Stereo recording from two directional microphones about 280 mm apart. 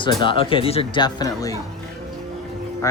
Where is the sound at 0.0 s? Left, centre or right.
Centre.